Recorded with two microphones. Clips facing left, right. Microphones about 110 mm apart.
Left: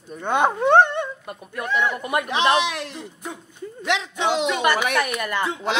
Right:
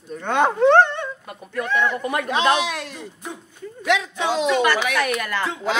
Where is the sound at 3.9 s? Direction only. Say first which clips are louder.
Even; 20° left (ahead or behind).